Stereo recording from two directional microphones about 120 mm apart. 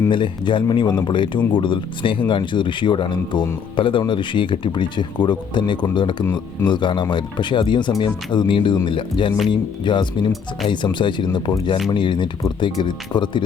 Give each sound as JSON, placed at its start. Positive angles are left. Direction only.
{"t": 0.1, "sound": "speech", "side_deg": 40}